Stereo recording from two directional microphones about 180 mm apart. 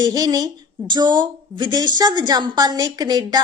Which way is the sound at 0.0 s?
20° right (ahead or behind).